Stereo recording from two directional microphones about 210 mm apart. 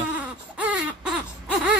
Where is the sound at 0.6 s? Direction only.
5° right (ahead or behind).